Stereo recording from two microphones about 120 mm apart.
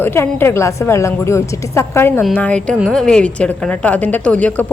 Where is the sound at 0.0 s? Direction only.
20° left (ahead or behind).